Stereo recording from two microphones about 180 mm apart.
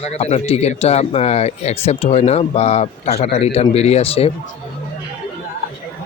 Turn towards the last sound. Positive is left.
turn(degrees=35)  # may be behind; listen again after turning